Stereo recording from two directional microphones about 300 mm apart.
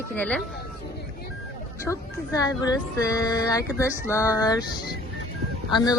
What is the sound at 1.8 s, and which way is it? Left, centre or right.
Speech, centre.